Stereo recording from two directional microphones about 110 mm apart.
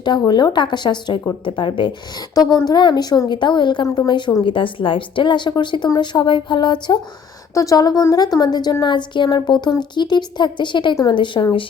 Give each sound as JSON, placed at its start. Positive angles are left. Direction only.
{"t": 0.0, "sound": "a woman's voice", "side_deg": 40}
{"t": 4.4, "sound": "a woman's voice", "side_deg": 50}
{"t": 7.5, "sound": "a woman's voice", "side_deg": 30}